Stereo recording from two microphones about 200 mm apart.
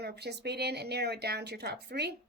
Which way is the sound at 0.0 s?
55° right (ahead or behind).